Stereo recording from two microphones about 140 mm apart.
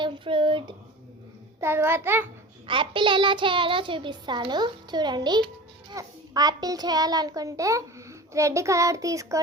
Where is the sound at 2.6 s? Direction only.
35° right (ahead or behind).